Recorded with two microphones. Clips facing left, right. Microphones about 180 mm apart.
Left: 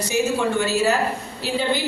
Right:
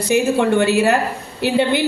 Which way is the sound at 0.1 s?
60° right (ahead or behind).